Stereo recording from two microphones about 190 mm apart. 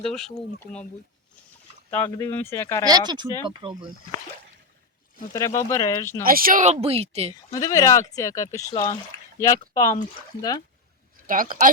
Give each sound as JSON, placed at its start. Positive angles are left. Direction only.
{"t": 0.0, "sound": "speech", "side_deg": 0}
{"t": 1.9, "sound": "speech", "side_deg": 10}
{"t": 2.8, "sound": "speech", "side_deg": -20}
{"t": 5.3, "sound": "speech", "side_deg": 15}
{"t": 6.2, "sound": "speech", "side_deg": -50}
{"t": 7.5, "sound": "speech", "side_deg": 20}
{"t": 11.3, "sound": "speech", "side_deg": -45}